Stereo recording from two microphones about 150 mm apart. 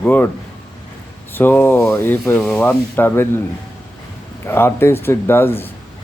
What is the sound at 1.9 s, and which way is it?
Speech, 15° left (ahead or behind).